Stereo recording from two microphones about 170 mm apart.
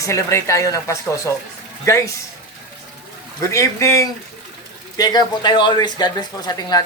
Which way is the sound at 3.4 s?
15° left (ahead or behind).